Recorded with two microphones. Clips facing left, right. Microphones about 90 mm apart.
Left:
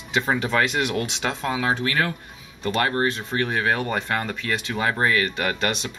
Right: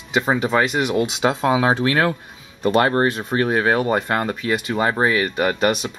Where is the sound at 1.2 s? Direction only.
20° right (ahead or behind).